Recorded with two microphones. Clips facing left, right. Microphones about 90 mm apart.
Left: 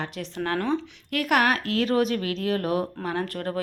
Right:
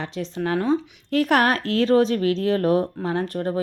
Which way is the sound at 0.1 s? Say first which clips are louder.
Right 4 dB; 20° right (ahead or behind).